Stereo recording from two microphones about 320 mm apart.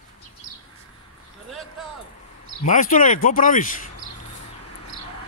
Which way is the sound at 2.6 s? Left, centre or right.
Left.